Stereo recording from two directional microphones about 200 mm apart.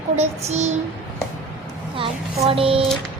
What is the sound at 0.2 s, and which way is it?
Speech, 35° right (ahead or behind).